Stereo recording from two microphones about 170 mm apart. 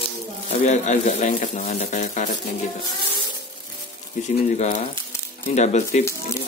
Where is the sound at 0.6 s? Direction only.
45° left (ahead or behind).